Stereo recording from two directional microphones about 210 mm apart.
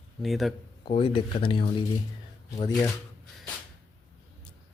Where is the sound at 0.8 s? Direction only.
25° left (ahead or behind).